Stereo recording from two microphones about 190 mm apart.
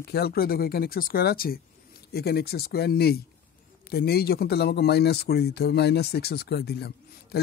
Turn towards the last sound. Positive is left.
turn(degrees=55)  # may be behind; listen again after turning